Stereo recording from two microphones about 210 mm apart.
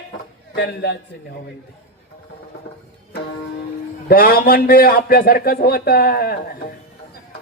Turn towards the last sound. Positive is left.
turn(degrees=45)  # may be behind; listen again after turning